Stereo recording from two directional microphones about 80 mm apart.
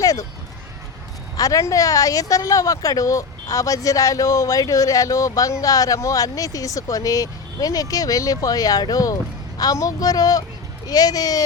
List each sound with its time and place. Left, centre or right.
1.4 s speech: left